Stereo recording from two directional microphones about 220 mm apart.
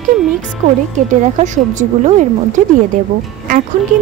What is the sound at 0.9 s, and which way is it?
A woman's voice, 35° right (ahead or behind).